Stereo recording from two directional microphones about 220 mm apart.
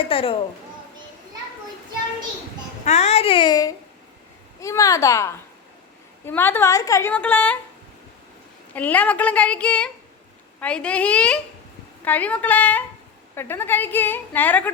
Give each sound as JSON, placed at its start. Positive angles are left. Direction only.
{"t": 0.0, "sound": "a woman's voice", "side_deg": 25}
{"t": 2.8, "sound": "a woman's voice", "side_deg": 30}
{"t": 8.7, "sound": "a woman's voice", "side_deg": 5}